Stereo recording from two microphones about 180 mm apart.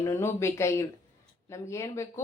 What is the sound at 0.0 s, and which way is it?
A woman's voice, 15° left (ahead or behind).